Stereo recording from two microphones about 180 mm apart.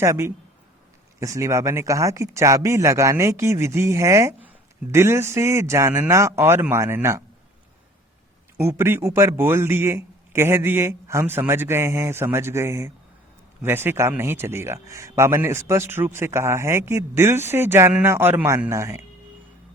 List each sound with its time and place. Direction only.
0.0 s speech: 15° right (ahead or behind)
8.5 s speech: 15° right (ahead or behind)